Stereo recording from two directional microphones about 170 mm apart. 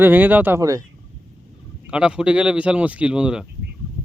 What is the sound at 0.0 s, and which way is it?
Speech, 10° right (ahead or behind).